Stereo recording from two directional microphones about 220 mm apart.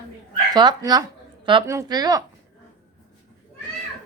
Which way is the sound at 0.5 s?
20° right (ahead or behind).